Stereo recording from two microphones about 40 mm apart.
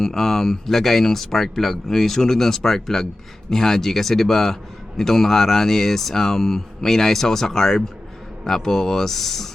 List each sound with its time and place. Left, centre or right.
0.0 s speech: centre